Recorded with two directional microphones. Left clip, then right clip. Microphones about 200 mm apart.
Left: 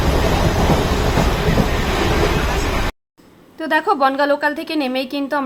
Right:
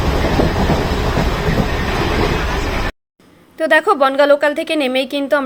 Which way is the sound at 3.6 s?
10° right (ahead or behind).